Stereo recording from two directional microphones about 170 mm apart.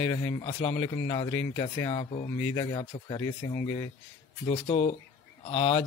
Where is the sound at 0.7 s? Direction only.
20° left (ahead or behind).